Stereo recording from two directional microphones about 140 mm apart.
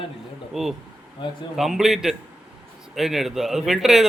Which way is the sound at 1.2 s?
35° left (ahead or behind).